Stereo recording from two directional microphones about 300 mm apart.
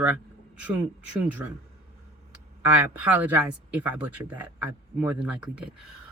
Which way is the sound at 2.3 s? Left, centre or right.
Centre.